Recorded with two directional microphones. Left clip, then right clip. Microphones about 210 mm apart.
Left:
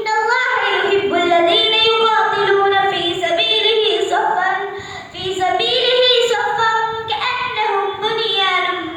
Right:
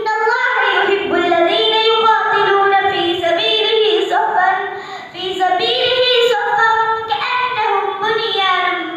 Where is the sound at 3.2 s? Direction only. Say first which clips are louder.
Left 1 dB; 10° left (ahead or behind).